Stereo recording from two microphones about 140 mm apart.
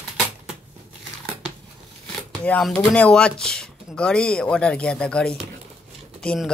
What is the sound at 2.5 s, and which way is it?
Speech, 5° left (ahead or behind).